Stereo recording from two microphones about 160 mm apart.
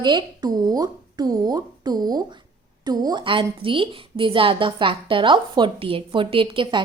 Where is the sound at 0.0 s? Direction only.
25° right (ahead or behind).